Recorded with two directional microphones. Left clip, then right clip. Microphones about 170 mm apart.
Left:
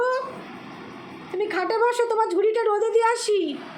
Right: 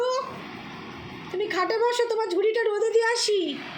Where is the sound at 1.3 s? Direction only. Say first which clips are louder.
Left 2 dB; 10° left (ahead or behind).